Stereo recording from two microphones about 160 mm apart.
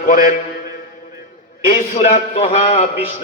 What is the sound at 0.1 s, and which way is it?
Speech, 55° left (ahead or behind).